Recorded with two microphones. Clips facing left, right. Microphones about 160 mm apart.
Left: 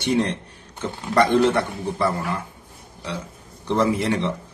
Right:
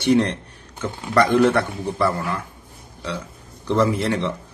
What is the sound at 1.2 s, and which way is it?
Speech, 25° left (ahead or behind).